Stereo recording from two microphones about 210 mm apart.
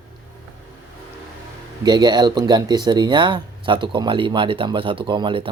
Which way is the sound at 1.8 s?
20° right (ahead or behind).